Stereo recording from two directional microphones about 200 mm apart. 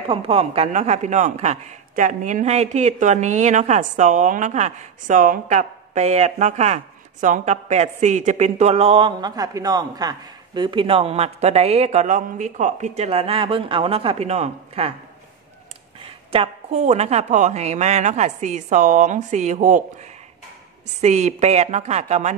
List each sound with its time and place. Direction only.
0.1 s speech: 30° right (ahead or behind)
16.0 s speech: 30° right (ahead or behind)